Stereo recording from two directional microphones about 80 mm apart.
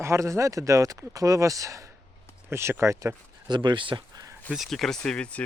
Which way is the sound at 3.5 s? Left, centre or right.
Right.